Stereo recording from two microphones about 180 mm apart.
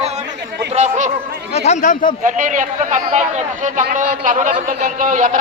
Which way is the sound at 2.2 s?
45° right (ahead or behind).